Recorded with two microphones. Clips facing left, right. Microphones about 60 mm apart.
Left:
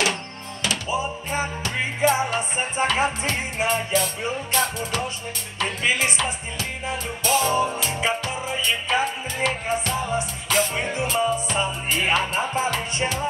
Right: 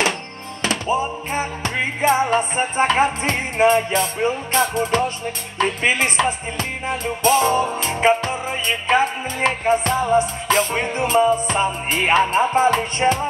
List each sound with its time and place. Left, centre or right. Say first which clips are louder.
0.6 s music: right 5 dB; right